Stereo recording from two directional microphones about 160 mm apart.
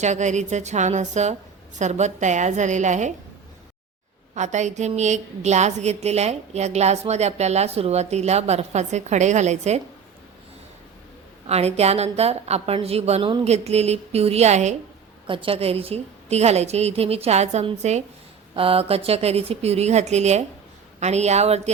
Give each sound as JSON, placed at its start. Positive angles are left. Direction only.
{"t": 0.0, "sound": "a woman's voice", "side_deg": -50}
{"t": 4.4, "sound": "a woman's voice", "side_deg": -45}
{"t": 11.4, "sound": "a woman's voice", "side_deg": -40}
{"t": 15.3, "sound": "a woman's voice", "side_deg": -35}